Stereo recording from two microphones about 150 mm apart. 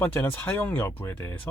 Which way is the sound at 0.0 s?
15° left (ahead or behind).